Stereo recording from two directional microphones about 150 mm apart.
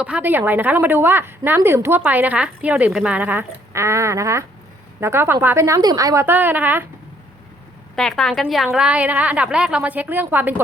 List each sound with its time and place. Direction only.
0.0 s a woman's voice: 10° right (ahead or behind)
7.9 s a woman's voice: 5° left (ahead or behind)